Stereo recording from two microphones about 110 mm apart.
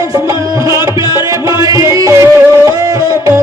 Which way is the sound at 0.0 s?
30° right (ahead or behind).